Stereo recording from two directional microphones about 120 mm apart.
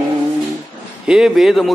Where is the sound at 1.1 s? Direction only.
5° right (ahead or behind).